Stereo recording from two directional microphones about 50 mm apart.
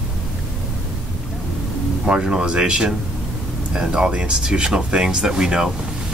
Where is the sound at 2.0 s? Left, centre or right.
Centre.